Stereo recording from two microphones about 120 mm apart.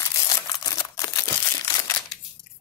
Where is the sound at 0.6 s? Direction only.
30° left (ahead or behind).